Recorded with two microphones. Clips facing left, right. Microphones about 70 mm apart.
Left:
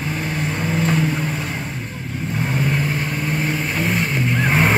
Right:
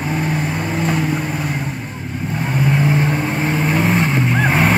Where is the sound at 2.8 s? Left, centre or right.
Right.